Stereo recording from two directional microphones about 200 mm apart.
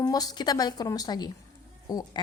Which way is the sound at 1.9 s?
20° left (ahead or behind).